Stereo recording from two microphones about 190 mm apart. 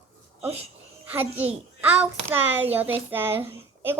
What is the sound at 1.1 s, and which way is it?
A child's voice, 10° right (ahead or behind).